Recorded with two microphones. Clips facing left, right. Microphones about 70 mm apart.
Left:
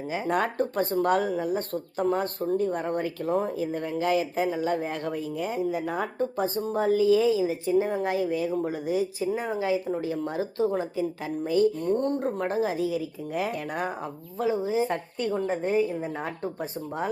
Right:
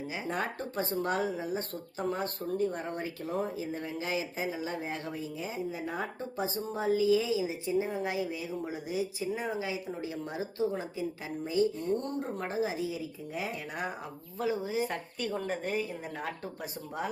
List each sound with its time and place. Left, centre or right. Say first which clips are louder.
0.3 s speech: left 9 dB; left
9.0 s speech: left 3 dB; centre
9.5 s speech: left 8 dB; left
14.4 s a woman's voice: left 6 dB; left